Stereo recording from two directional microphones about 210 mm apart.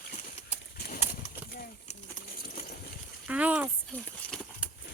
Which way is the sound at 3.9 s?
5° left (ahead or behind).